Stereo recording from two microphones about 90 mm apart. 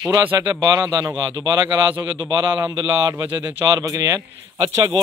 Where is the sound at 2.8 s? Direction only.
45° right (ahead or behind).